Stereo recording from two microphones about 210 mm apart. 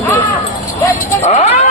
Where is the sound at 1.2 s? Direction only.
30° left (ahead or behind).